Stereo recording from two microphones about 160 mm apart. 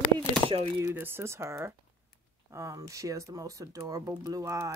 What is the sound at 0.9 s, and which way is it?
Speech, 15° right (ahead or behind).